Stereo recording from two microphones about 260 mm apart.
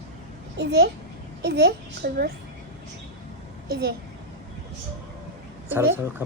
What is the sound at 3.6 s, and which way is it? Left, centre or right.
Speech, right.